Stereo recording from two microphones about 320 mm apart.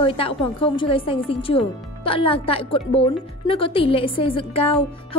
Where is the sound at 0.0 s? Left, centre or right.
Centre.